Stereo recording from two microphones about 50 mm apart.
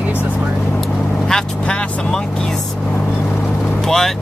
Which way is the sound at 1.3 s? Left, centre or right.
Centre.